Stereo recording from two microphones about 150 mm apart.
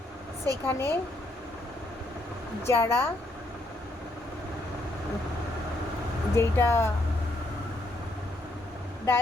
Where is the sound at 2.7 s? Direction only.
15° left (ahead or behind).